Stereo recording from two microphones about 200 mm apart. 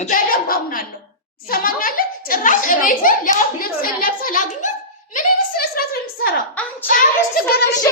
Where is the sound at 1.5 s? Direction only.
45° left (ahead or behind).